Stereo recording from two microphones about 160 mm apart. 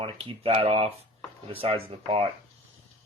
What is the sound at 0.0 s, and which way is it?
Speech, 35° right (ahead or behind).